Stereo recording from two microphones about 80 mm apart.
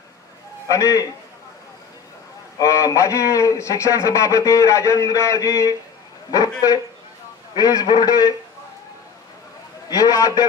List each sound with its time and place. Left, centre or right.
0.7 s a man's voice: left
2.6 s a man's voice: left
7.5 s a man's voice: left
9.8 s a man's voice: left